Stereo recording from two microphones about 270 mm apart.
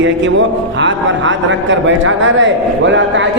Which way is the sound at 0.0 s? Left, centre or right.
Right.